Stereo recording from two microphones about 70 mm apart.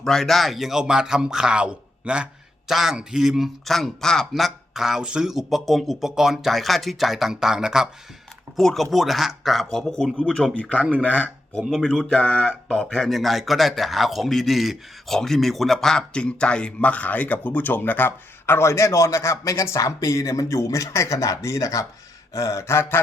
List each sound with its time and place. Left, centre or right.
0.0 s speech: centre
2.6 s a man's voice: centre
8.5 s a man's voice: centre
11.7 s speech: centre
13.1 s speech: centre; by 21.8 s left
22.3 s a sound: left